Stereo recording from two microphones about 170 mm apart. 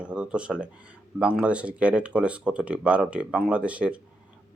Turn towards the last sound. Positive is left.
turn(degrees=-5)  # may be behind; listen again after turning